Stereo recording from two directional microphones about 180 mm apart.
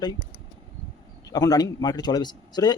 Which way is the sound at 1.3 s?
20° left (ahead or behind).